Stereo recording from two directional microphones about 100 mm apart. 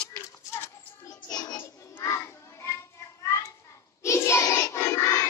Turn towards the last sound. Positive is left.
turn(degrees=30)  # may be behind; listen again after turning